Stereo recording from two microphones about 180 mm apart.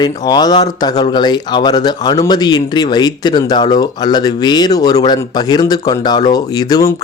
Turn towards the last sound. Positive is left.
turn(degrees=20)  # may be behind; listen again after turning